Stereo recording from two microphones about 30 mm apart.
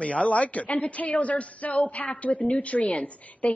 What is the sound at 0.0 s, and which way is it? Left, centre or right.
A woman's voice, left.